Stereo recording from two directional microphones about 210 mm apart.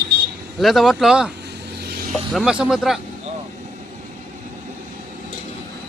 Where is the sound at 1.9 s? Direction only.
45° right (ahead or behind).